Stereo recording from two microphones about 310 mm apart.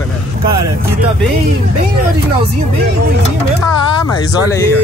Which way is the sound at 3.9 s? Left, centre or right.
Centre.